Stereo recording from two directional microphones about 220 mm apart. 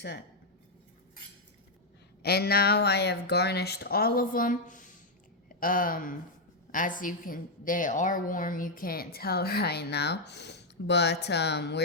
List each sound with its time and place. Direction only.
2.2 s a woman's voice: 45° left (ahead or behind)